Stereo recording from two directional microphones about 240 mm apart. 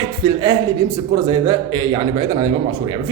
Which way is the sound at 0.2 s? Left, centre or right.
Centre.